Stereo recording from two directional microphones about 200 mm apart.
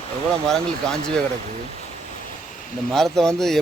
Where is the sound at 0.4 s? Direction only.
5° left (ahead or behind).